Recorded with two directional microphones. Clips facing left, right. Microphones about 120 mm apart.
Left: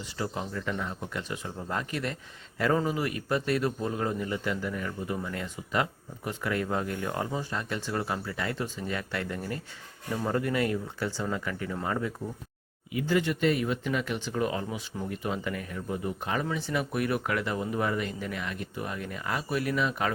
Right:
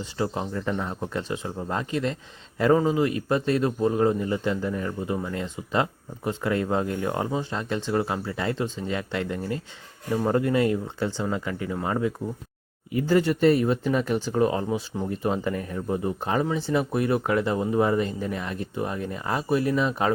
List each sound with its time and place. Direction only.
0.0 s a man's voice: 25° right (ahead or behind)
12.9 s speech: 40° right (ahead or behind)